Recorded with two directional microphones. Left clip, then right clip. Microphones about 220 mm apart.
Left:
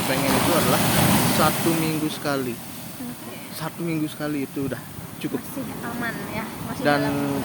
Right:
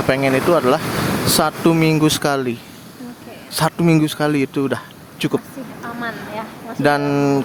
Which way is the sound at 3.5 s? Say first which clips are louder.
Right 13 dB; 50° right (ahead or behind).